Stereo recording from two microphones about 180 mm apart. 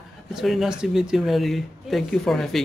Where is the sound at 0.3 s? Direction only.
Centre (ahead or behind).